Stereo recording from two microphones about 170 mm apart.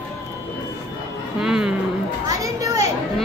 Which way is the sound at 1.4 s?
5° right (ahead or behind).